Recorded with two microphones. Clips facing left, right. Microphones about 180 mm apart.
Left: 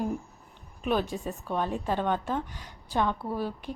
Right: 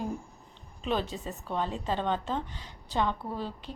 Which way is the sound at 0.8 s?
10° left (ahead or behind).